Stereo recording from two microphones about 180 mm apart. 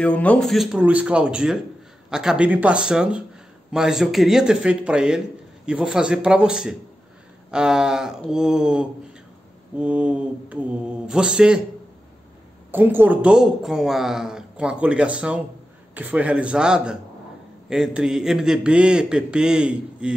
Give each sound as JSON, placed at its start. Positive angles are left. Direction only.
{"t": 0.0, "sound": "speech", "side_deg": 5}
{"t": 9.8, "sound": "mantra", "side_deg": -5}
{"t": 12.7, "sound": "speech", "side_deg": -10}
{"t": 15.9, "sound": "mantra", "side_deg": -10}
{"t": 17.6, "sound": "speech", "side_deg": 0}